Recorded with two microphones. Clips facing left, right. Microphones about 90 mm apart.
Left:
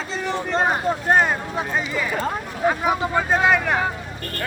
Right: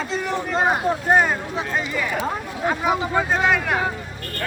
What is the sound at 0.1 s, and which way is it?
Speech, 5° right (ahead or behind).